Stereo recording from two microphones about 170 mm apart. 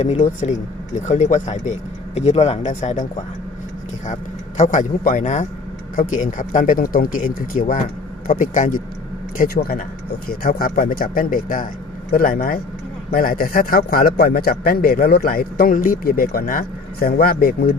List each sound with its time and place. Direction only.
0.0 s a man's voice: 45° left (ahead or behind); by 17.7 s 60° left (ahead or behind)